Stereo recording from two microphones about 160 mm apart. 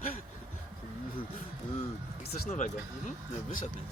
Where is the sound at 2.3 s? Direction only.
50° left (ahead or behind).